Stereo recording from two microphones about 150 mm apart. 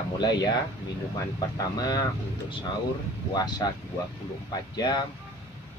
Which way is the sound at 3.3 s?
25° left (ahead or behind).